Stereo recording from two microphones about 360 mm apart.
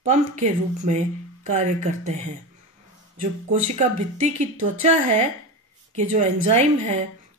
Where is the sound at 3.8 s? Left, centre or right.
Centre.